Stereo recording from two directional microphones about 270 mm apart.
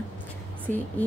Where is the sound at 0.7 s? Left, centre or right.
Right.